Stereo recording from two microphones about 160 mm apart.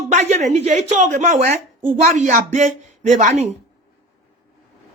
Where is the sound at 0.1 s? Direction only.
45° right (ahead or behind).